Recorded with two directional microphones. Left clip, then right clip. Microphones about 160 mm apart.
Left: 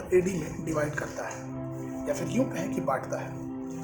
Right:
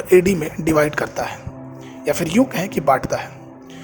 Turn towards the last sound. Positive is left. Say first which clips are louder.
# right 12 dB
turn(degrees=-50)  # may be behind; listen again after turning